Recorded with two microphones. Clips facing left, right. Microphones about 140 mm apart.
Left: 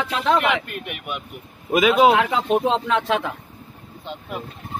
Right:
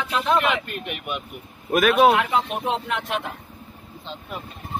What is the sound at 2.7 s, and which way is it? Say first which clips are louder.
Speech: left 5 dB; 90° left.